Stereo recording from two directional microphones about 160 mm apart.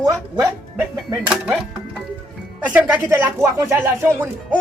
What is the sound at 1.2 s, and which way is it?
Speech, 5° right (ahead or behind).